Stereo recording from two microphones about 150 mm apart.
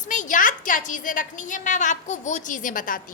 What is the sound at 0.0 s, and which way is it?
A woman's voice, 55° left (ahead or behind).